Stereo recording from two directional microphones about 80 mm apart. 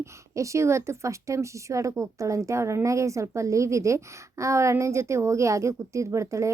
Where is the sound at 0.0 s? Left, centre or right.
Right.